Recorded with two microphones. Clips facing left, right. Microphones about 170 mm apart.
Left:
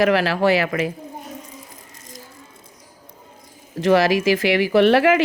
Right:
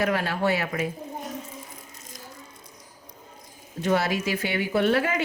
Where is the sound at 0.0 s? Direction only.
90° left.